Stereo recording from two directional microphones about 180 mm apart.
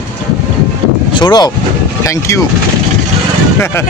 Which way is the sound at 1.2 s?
20° left (ahead or behind).